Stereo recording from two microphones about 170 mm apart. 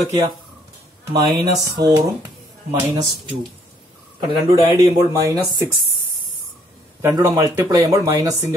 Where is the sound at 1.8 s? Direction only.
70° right (ahead or behind).